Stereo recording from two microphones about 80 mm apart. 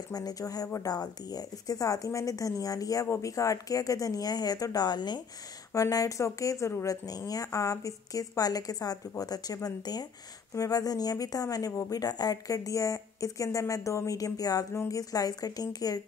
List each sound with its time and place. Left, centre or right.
0.1 s a woman's voice: left
5.7 s a woman's voice: left